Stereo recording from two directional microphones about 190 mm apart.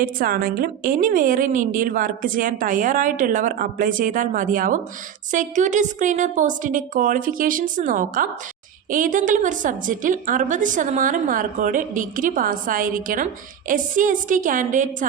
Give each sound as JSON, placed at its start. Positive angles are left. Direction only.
{"t": 0.0, "sound": "a woman's voice", "side_deg": -50}